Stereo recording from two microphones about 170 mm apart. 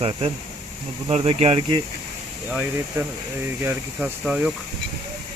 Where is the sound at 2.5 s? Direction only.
15° right (ahead or behind).